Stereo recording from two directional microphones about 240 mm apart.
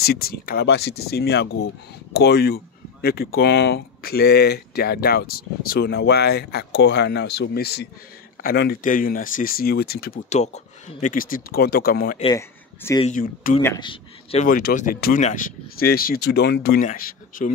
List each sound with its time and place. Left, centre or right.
0.0 s speech: left
12.2 s speech: centre
13.0 s speech: left
13.6 s a man's voice: centre
14.4 s speech: left